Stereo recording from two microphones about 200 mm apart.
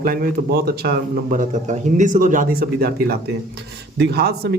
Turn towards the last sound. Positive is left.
turn(degrees=-55)  # may be behind; listen again after turning